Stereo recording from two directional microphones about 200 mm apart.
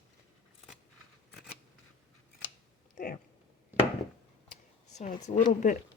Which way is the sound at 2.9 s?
45° left (ahead or behind).